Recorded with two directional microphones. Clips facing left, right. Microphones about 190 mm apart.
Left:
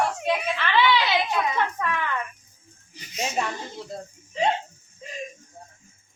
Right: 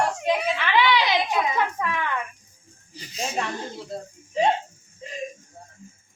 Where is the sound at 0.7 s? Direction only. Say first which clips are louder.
Even; 15° right (ahead or behind).